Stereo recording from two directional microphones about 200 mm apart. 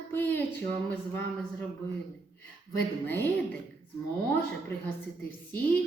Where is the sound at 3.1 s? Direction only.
10° left (ahead or behind).